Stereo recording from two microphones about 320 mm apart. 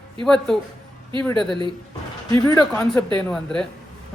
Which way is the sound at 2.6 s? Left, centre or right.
Centre.